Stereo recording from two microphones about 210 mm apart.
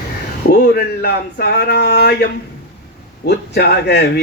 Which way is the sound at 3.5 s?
50° left (ahead or behind).